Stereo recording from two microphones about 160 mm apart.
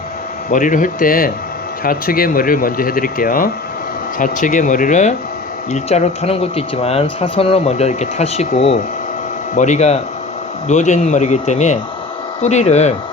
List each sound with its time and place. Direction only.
0.5 s speech: 55° left (ahead or behind)